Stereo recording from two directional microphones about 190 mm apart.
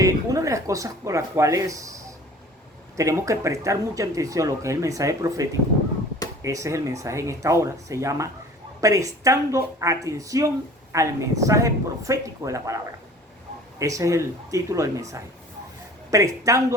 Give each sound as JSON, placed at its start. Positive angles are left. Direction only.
{"t": 0.0, "sound": "speech", "side_deg": -15}